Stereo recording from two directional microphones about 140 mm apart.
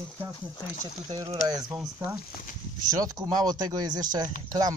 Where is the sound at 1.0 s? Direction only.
25° right (ahead or behind).